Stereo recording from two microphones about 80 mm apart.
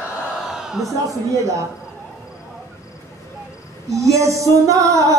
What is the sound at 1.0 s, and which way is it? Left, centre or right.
Speech, right.